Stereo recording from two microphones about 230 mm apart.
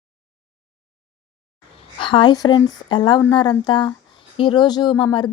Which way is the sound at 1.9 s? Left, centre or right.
Left.